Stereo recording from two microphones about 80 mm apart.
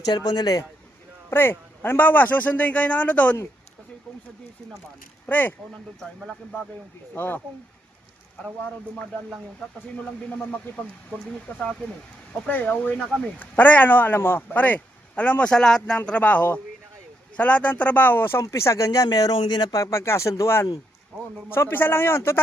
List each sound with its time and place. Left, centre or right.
0.1 s speech: left
1.3 s speech: left
5.2 s speech: left
7.1 s speech: left
11.5 s speech: left
16.0 s speech: centre
18.4 s speech: left
19.8 s speech: left